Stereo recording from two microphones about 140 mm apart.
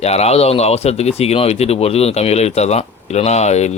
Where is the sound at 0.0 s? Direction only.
50° left (ahead or behind).